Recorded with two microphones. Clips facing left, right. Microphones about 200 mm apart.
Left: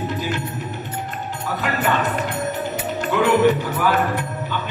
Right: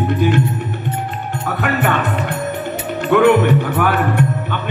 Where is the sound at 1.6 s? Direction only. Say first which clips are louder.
Right 4 dB; 60° right (ahead or behind).